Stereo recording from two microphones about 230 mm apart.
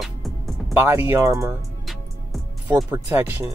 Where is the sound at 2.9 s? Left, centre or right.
Centre.